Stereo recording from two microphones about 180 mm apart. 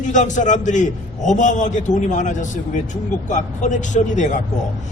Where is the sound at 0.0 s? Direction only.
45° left (ahead or behind).